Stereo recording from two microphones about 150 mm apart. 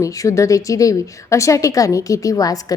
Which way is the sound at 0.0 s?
20° left (ahead or behind).